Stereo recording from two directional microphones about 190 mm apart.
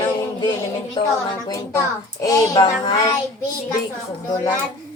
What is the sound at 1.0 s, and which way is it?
A child's voice, 25° left (ahead or behind).